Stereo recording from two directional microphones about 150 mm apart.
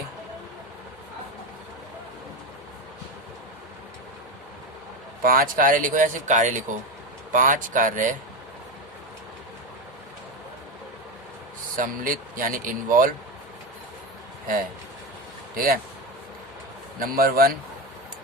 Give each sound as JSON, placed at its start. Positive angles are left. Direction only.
{"t": 5.2, "sound": "speech", "side_deg": -70}
{"t": 11.8, "sound": "speech", "side_deg": -65}
{"t": 15.5, "sound": "speech", "side_deg": -75}
{"t": 17.0, "sound": "a man's voice", "side_deg": -85}